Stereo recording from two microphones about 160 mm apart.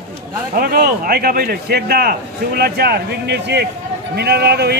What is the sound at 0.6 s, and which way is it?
A man's voice, 65° right (ahead or behind).